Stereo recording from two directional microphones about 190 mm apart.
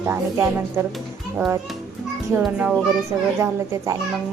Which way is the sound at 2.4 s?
5° right (ahead or behind).